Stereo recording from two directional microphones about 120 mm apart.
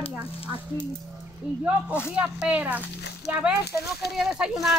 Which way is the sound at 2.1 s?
10° right (ahead or behind).